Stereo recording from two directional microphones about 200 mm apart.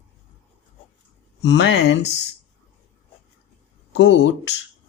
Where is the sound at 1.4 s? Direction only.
60° left (ahead or behind).